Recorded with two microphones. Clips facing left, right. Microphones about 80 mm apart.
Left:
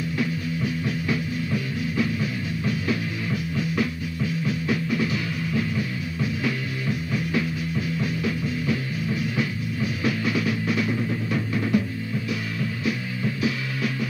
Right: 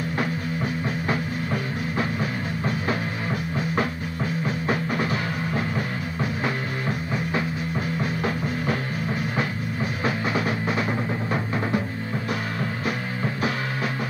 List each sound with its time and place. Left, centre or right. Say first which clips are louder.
0.2 s music: left 1 dB; right
12.8 s music: even; right